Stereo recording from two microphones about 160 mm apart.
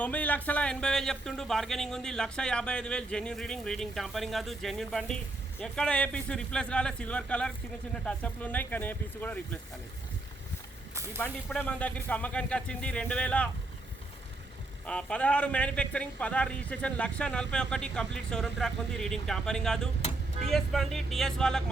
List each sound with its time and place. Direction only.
0.0 s a man's voice: 10° left (ahead or behind)
10.9 s vehicle: 20° right (ahead or behind)
11.2 s a man's voice: 10° left (ahead or behind)
14.8 s a man's voice: 5° left (ahead or behind)